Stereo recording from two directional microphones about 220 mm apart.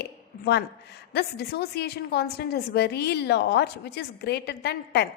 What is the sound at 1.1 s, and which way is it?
A woman's voice, 45° left (ahead or behind).